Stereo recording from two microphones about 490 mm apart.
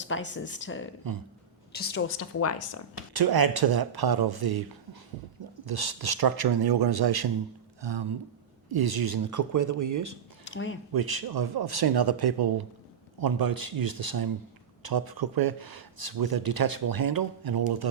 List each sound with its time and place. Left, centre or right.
0.0 s speech: left
3.1 s speech: right
5.6 s speech: right
8.7 s speech: right
10.4 s speech: left
10.9 s speech: right